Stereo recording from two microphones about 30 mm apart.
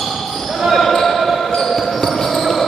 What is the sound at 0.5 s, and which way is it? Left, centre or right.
Basketball bounce, centre.